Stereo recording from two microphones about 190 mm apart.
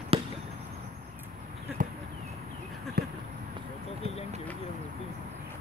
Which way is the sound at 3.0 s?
55° right (ahead or behind).